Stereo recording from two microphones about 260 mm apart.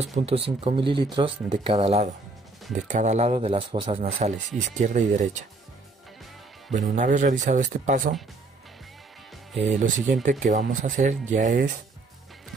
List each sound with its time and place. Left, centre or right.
0.0 s speech: right
6.7 s speech: right
9.6 s speech: right